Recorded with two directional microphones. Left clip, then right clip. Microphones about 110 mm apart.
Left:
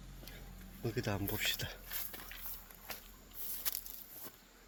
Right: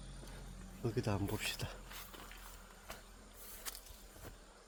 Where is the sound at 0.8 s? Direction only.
20° right (ahead or behind).